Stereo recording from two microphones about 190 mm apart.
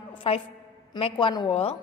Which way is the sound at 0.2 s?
30° left (ahead or behind).